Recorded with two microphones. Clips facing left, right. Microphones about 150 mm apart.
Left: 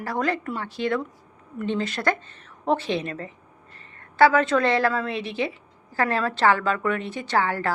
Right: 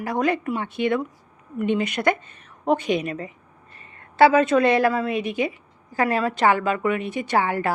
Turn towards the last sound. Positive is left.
turn(degrees=-20)  # may be behind; listen again after turning